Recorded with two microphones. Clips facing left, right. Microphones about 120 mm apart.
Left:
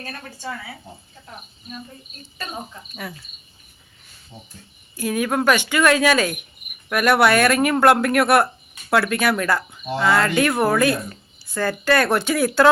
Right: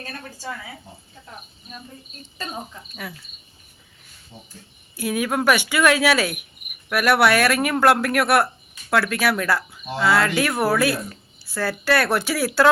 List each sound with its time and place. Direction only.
2.5 s speech: 5° left (ahead or behind)
4.9 s a woman's voice: 10° right (ahead or behind)